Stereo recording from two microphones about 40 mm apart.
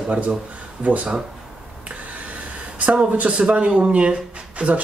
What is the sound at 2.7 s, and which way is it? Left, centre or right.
Speech, right.